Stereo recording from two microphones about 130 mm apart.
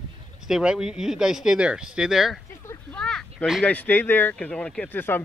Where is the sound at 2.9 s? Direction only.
5° left (ahead or behind).